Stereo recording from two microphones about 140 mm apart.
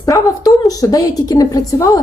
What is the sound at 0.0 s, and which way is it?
A woman's voice, 25° left (ahead or behind).